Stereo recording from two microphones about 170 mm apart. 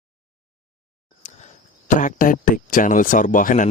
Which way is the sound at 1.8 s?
50° left (ahead or behind).